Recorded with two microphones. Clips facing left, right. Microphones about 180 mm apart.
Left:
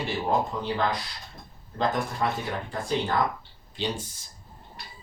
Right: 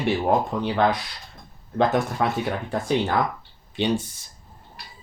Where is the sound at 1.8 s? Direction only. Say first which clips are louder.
Right 5 dB; 70° right (ahead or behind).